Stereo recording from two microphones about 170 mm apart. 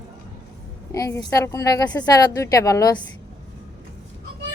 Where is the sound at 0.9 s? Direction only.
20° left (ahead or behind).